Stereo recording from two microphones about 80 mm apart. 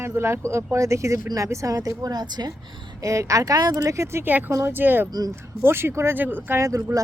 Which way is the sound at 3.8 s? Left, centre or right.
Right.